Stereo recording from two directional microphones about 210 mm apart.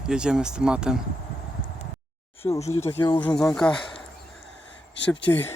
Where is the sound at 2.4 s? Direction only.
20° left (ahead or behind).